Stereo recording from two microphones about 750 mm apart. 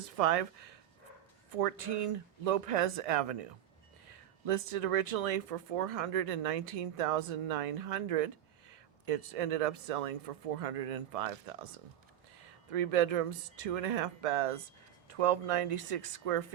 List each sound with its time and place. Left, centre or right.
0.2 s speech: right
12.7 s speech: right